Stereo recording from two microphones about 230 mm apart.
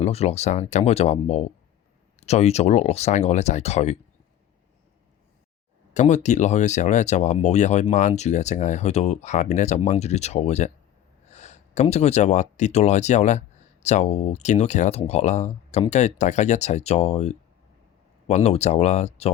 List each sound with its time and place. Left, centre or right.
0.0 s speech: left
5.9 s speech: left